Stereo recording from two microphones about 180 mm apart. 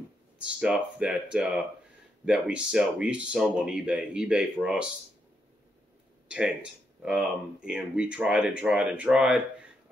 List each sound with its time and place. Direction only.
0.5 s speech: 5° right (ahead or behind)
6.2 s speech: 5° right (ahead or behind)